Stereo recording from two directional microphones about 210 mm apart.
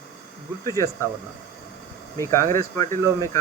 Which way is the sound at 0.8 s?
15° left (ahead or behind).